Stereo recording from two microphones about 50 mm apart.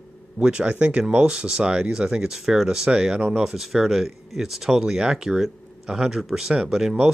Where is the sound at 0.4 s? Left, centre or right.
Centre.